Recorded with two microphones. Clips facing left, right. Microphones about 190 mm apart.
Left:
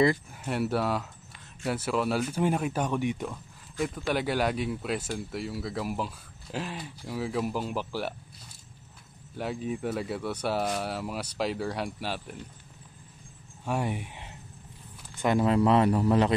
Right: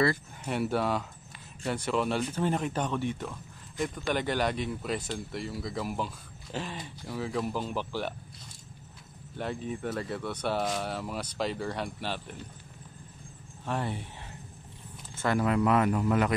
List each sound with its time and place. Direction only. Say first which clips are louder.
0.4 s speech: left 1 dB; 5° left (ahead or behind)
3.8 s speech: left 1 dB; 5° left (ahead or behind)
9.4 s speech: left 2 dB; 5° left (ahead or behind)
13.7 s speech: left 3 dB; 10° left (ahead or behind); by 16.3 s 30° left (ahead or behind)